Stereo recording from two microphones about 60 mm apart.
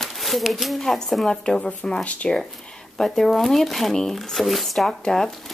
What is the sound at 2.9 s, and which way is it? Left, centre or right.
Speech, centre.